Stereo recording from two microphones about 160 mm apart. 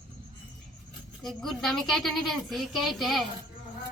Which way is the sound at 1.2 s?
Centre (ahead or behind).